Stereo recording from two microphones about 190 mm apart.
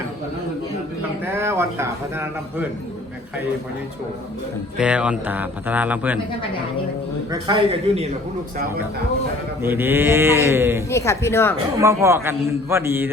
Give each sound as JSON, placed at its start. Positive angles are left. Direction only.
{"t": 1.2, "sound": "speech", "side_deg": -10}
{"t": 4.8, "sound": "speech", "side_deg": -5}
{"t": 7.3, "sound": "a man's voice", "side_deg": -25}
{"t": 9.6, "sound": "speech", "side_deg": -10}
{"t": 10.8, "sound": "speech", "side_deg": 15}
{"t": 11.8, "sound": "speech", "side_deg": -15}